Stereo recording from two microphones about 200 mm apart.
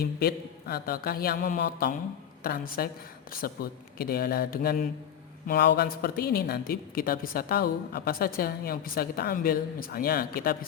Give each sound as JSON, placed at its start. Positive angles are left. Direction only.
{"t": 0.0, "sound": "a woman's voice", "side_deg": 50}